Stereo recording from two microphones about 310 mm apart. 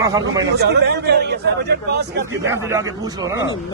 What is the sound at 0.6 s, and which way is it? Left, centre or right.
Speech, right.